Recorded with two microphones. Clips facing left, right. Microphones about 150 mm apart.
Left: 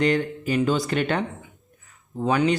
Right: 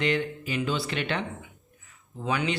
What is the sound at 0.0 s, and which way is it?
Speech, 45° left (ahead or behind).